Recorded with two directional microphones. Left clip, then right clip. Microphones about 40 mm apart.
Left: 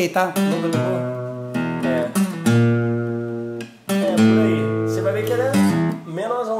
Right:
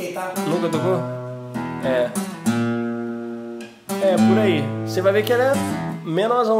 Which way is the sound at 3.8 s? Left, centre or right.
Left.